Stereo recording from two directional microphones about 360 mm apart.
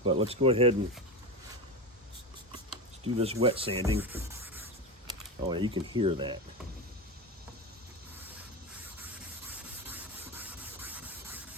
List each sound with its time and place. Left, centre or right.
0.0 s speech: centre
3.0 s speech: centre
3.8 s rub: centre
5.0 s speech: centre
9.5 s rub: centre